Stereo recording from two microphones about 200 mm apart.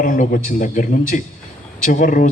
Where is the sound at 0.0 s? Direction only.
40° left (ahead or behind).